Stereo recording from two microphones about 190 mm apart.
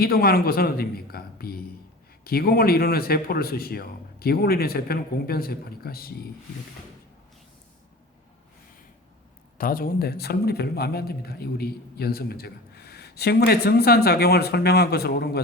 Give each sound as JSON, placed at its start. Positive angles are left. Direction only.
{"t": 0.0, "sound": "a man's voice", "side_deg": 55}
{"t": 9.6, "sound": "a man's voice", "side_deg": 50}